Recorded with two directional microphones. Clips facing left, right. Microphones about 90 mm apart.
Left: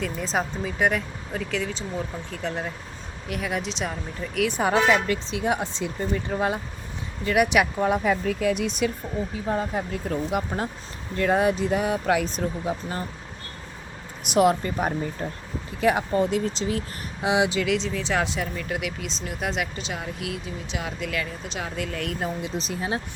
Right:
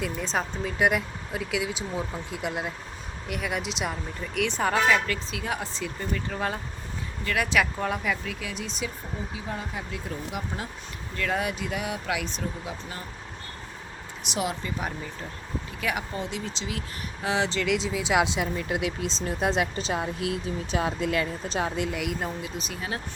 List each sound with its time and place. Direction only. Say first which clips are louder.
0.0 s speech: left 2 dB; centre (ahead or behind)
4.6 s speech: left 2 dB; 20° left (ahead or behind)
8.0 s speech: left 8 dB; 40° left (ahead or behind); by 8.9 s 60° left (ahead or behind)
9.3 s speech: left 9 dB; 45° left (ahead or behind)
11.2 s speech: left 7 dB; 30° left (ahead or behind)
14.3 s speech: left 10 dB; 50° left (ahead or behind)
15.8 s speech: left 9 dB; 30° left (ahead or behind)
16.1 s speech: left 10 dB; 45° left (ahead or behind)
17.2 s speech: left 4 dB; 15° left (ahead or behind)
17.7 s speech: even; 5° right (ahead or behind); by 21.9 s 25° right (ahead or behind)
21.9 s speech: left 1 dB; 5° right (ahead or behind)
22.4 s speech: left 5 dB; 30° left (ahead or behind)